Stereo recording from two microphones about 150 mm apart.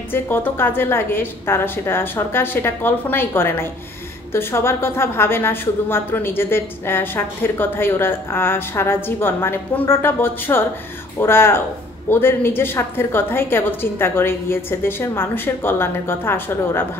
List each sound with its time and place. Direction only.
0.1 s a woman's voice: 15° left (ahead or behind)